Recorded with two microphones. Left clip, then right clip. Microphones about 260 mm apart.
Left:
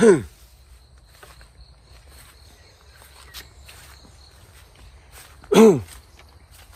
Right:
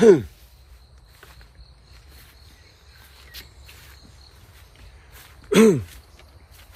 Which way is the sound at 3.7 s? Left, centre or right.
Centre.